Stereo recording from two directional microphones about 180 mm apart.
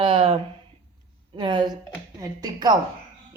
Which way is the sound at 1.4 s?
25° right (ahead or behind).